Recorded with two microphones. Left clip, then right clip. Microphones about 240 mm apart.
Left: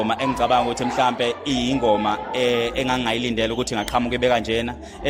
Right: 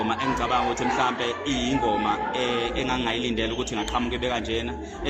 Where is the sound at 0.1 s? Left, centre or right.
Left.